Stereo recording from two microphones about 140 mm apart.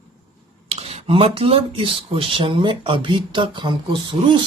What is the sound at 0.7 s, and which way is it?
A woman's voice, 50° right (ahead or behind).